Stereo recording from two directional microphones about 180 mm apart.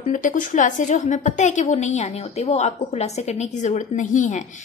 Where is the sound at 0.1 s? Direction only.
45° left (ahead or behind).